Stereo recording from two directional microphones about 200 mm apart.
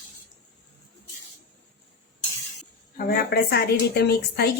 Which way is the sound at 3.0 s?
50° left (ahead or behind).